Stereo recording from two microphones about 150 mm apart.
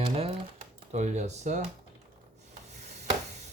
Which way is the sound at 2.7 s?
50° right (ahead or behind).